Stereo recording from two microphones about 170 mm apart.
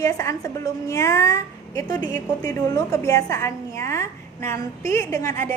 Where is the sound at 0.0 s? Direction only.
20° left (ahead or behind).